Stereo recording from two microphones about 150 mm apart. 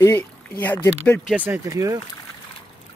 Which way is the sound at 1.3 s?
10° right (ahead or behind).